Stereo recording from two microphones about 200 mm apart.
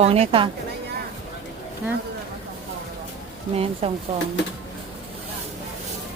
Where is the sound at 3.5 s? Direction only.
30° right (ahead or behind).